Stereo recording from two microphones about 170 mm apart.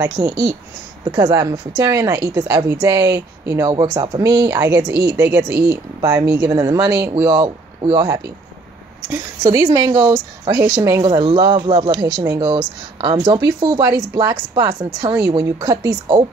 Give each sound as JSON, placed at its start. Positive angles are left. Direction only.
{"t": 0.2, "sound": "a woman's voice", "side_deg": -20}
{"t": 11.1, "sound": "a woman's voice", "side_deg": -30}